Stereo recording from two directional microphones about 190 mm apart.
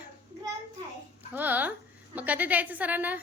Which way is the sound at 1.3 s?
10° right (ahead or behind).